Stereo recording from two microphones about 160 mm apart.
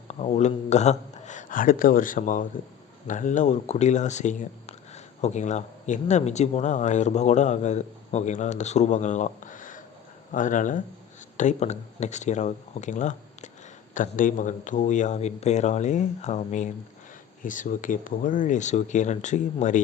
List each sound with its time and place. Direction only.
0.1 s speech: 45° left (ahead or behind)